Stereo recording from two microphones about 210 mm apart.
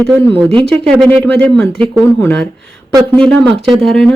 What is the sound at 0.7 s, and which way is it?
Speech, 5° left (ahead or behind).